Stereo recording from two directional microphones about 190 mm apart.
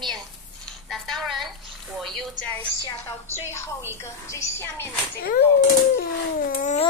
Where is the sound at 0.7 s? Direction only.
Centre (ahead or behind).